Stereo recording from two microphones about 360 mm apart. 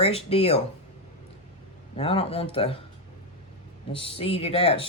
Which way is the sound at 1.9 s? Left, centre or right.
Centre.